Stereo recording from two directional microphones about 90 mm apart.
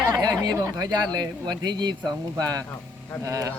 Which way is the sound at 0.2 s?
45° right (ahead or behind).